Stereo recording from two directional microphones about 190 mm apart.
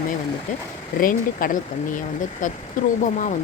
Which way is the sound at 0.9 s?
45° left (ahead or behind).